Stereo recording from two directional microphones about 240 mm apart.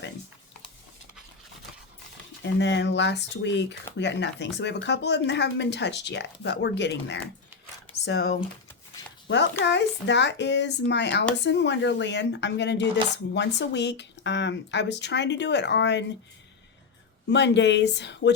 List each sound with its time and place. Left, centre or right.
2.4 s speech: left
17.2 s speech: left